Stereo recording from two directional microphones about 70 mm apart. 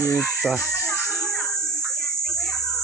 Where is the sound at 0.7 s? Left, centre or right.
Left.